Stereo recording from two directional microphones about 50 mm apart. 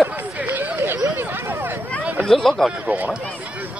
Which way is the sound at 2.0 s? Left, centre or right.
Right.